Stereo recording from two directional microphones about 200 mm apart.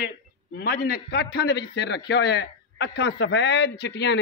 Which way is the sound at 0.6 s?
50° left (ahead or behind).